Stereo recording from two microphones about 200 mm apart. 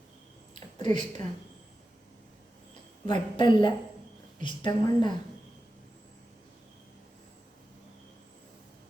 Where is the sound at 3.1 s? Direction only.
20° left (ahead or behind).